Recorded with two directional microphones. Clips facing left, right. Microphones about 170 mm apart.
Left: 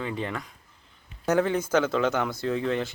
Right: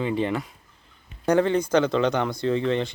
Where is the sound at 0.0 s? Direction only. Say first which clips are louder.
Right 7 dB; 20° right (ahead or behind).